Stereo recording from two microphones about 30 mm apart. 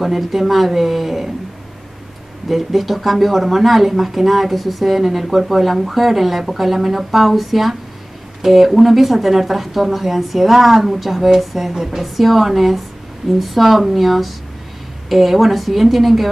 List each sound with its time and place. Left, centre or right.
0.0 s speech: centre
2.4 s speech: centre
11.7 s a woman's voice: centre
12.0 s speech: centre